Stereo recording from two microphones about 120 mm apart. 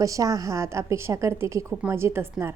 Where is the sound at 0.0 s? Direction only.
30° right (ahead or behind).